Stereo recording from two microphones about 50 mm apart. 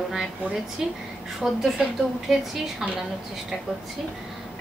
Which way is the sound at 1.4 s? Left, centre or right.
Centre.